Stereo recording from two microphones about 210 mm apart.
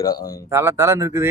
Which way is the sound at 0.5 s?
10° right (ahead or behind).